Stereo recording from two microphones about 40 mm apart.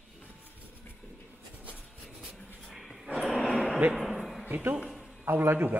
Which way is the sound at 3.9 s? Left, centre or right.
Centre.